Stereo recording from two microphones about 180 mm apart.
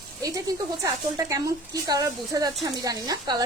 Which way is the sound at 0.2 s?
20° right (ahead or behind).